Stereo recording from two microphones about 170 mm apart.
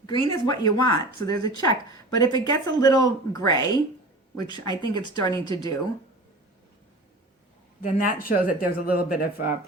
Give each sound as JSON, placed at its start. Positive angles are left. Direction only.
{"t": 0.0, "sound": "speech", "side_deg": 25}
{"t": 7.8, "sound": "speech", "side_deg": 50}